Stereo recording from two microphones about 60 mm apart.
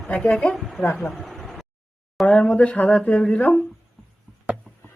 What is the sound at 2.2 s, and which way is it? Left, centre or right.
Speech, left.